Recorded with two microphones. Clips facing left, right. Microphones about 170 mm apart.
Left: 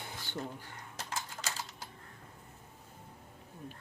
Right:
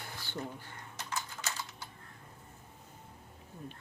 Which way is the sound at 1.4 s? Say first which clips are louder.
Even; 40° left (ahead or behind).